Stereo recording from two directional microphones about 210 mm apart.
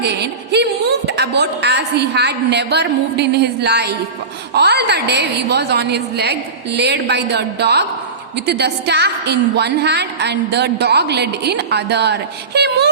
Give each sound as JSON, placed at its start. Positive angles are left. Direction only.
{"t": 0.0, "sound": "a woman's voice", "side_deg": -55}